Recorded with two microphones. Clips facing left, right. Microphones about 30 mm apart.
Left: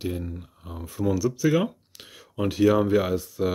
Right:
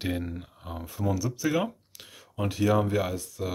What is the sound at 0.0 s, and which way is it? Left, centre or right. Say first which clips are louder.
Speech: even; right.